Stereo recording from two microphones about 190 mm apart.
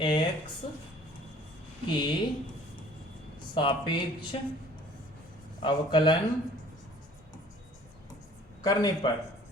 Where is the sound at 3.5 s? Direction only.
25° left (ahead or behind).